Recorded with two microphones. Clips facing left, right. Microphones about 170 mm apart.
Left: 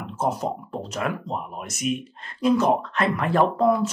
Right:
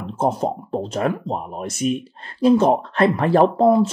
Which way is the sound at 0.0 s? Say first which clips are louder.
Right 5 dB; 30° right (ahead or behind).